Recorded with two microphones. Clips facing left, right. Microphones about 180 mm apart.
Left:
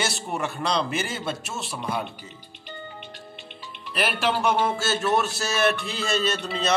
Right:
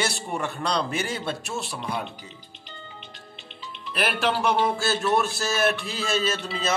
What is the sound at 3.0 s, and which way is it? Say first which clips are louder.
Music: left 4 dB; 55° left (ahead or behind).